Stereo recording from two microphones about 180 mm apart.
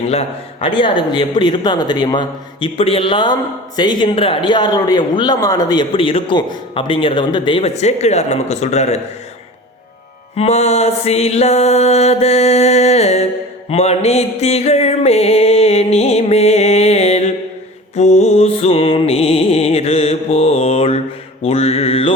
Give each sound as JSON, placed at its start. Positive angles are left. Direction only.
{"t": 0.1, "sound": "a man's voice", "side_deg": 30}
{"t": 10.3, "sound": "music", "side_deg": 35}
{"t": 21.4, "sound": "mantra", "side_deg": 35}